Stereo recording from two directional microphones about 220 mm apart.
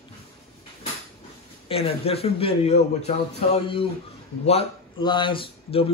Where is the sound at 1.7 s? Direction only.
25° left (ahead or behind).